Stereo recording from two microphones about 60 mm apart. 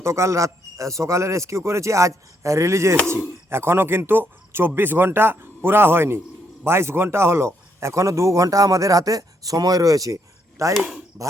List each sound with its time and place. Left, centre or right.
0.0 s speech: right
10.6 s speech: right